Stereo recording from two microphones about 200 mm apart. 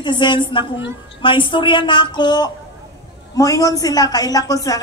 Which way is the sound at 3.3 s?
15° left (ahead or behind).